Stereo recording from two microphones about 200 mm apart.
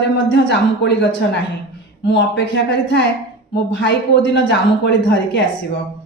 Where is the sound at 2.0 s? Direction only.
60° left (ahead or behind).